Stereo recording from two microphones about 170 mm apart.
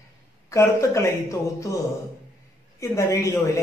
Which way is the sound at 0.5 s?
15° left (ahead or behind).